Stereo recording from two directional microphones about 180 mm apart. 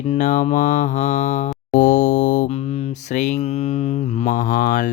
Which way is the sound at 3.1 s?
40° left (ahead or behind).